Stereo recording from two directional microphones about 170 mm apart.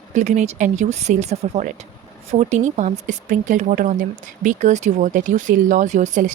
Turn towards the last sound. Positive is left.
turn(degrees=-45)  # may be behind; listen again after turning